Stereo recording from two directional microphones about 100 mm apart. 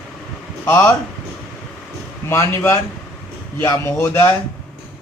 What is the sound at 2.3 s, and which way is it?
Speech, 25° left (ahead or behind).